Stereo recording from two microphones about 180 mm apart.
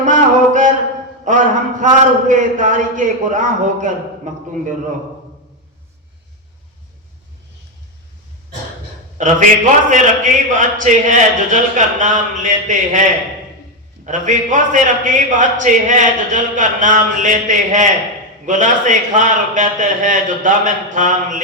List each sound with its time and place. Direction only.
0.0 s a sound: 45° right (ahead or behind)
1.8 s a man's voice: 45° right (ahead or behind)
9.1 s a man's voice: 45° right (ahead or behind)
14.0 s a man's voice: 45° right (ahead or behind)